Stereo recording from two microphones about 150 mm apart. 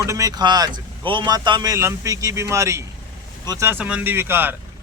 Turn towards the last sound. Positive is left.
turn(degrees=-15)  # may be behind; listen again after turning